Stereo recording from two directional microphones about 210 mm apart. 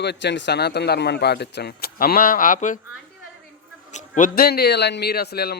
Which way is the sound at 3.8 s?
35° left (ahead or behind).